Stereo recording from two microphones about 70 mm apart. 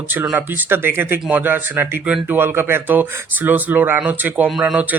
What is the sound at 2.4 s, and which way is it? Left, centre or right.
Speech, right.